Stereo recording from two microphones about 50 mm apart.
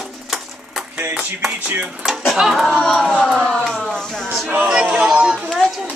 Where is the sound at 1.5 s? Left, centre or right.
Right.